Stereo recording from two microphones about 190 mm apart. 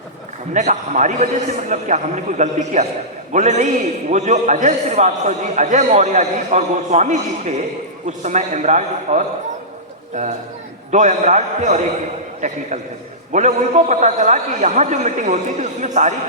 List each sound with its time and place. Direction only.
0.5 s a man's voice: 40° right (ahead or behind)